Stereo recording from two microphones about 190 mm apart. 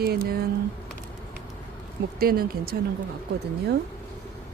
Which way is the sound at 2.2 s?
50° right (ahead or behind).